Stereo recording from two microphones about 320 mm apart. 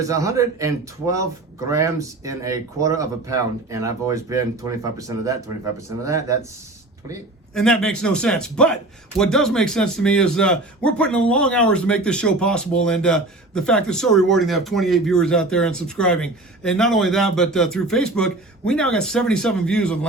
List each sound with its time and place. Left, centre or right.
0.1 s a man's voice: centre
7.5 s a man's voice: centre